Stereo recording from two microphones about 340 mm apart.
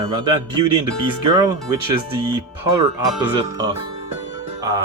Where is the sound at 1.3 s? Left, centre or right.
Centre.